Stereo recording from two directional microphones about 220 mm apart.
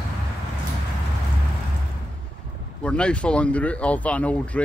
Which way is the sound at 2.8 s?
5° left (ahead or behind).